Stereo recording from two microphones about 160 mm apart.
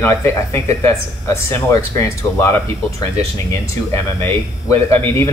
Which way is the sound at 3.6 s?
20° left (ahead or behind).